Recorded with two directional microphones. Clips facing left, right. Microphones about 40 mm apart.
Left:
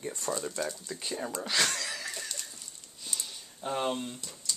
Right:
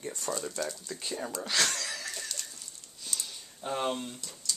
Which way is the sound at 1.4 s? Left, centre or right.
Centre.